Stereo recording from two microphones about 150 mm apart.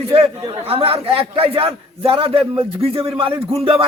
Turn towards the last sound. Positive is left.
turn(degrees=-40)  # may be behind; listen again after turning